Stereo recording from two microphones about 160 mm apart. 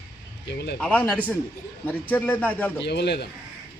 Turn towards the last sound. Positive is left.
turn(degrees=90)